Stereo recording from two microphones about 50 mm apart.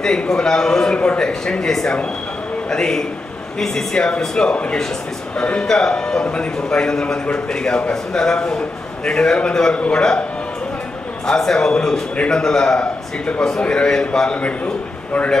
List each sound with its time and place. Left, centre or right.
0.0 s a man's voice: centre
11.2 s a man's voice: centre